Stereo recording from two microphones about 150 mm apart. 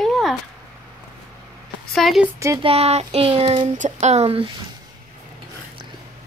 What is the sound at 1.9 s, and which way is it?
Speech, centre (ahead or behind).